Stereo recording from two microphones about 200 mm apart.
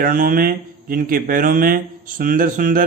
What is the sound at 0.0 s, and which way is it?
Speech, 45° right (ahead or behind).